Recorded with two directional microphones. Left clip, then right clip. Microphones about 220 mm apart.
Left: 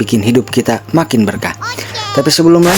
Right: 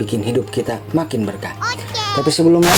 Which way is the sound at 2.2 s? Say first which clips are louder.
Left 5 dB; 35° left (ahead or behind).